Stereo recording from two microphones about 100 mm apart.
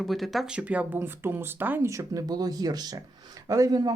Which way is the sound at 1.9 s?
35° right (ahead or behind).